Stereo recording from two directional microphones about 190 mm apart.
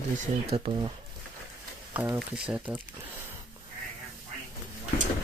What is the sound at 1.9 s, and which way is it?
Speech, 10° right (ahead or behind).